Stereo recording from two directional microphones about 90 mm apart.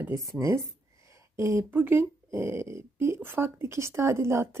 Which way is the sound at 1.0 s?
35° right (ahead or behind).